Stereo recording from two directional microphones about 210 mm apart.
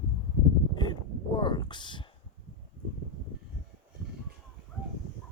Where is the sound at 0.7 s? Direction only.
20° left (ahead or behind).